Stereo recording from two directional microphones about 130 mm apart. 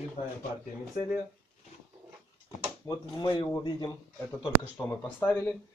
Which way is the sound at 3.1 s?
35° left (ahead or behind).